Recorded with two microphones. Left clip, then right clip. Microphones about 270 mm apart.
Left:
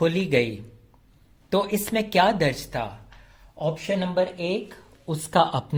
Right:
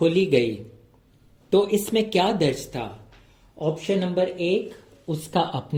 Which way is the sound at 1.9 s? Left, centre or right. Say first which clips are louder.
Left 1 dB; left.